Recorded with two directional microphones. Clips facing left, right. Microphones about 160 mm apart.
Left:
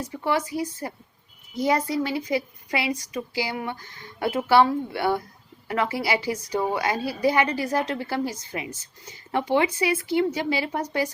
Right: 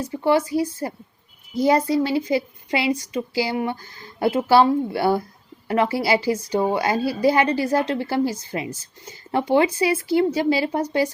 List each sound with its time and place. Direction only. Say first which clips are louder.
0.5 s a woman's voice: right 6 dB; 30° right (ahead or behind)